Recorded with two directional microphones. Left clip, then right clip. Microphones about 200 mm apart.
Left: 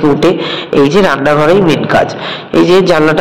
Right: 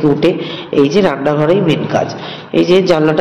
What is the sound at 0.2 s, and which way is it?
A man's voice, 15° left (ahead or behind).